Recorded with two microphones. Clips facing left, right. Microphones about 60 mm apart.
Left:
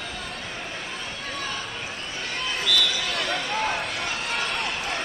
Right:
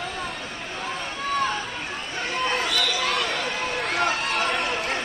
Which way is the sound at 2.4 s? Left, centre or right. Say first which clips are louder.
Even; right.